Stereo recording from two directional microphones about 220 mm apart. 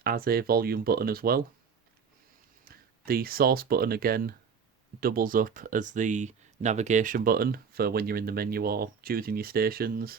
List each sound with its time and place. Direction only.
0.0 s speech: 45° right (ahead or behind)
2.6 s speech: 45° right (ahead or behind)